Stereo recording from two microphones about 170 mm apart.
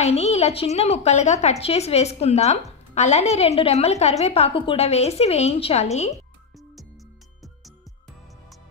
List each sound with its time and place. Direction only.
0.0 s a woman's voice: 40° left (ahead or behind)